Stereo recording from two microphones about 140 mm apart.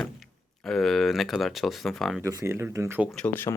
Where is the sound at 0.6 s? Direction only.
5° left (ahead or behind).